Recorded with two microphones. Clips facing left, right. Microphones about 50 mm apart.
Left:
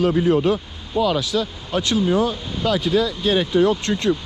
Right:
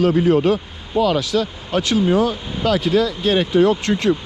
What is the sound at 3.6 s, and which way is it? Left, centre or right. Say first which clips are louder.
Speech: right 2 dB; right.